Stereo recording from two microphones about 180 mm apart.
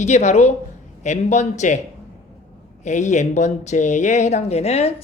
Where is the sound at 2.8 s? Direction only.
40° left (ahead or behind).